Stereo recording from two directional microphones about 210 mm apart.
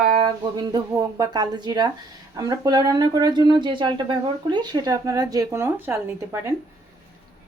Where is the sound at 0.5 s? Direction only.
20° right (ahead or behind).